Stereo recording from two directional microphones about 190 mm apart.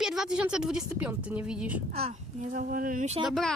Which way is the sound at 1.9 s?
35° right (ahead or behind).